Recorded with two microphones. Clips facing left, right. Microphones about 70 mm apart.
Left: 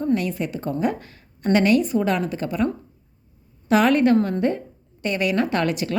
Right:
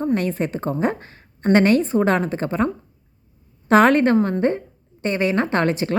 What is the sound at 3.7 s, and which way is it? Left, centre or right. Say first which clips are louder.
A woman's voice: right 2 dB; right.